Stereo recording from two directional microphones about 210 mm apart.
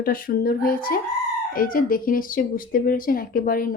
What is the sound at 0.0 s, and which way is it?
Speech, 45° left (ahead or behind).